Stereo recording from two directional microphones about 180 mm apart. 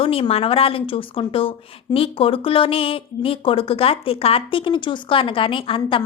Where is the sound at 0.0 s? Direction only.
30° left (ahead or behind).